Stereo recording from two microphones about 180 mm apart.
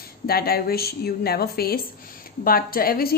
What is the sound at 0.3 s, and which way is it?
Speech, 60° left (ahead or behind).